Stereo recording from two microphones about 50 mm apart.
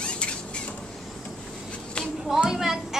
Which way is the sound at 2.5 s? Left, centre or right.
Centre.